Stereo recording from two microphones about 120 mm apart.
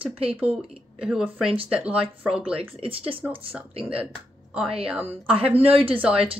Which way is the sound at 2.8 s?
50° right (ahead or behind).